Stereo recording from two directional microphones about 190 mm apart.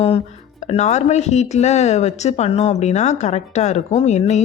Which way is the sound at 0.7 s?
35° left (ahead or behind).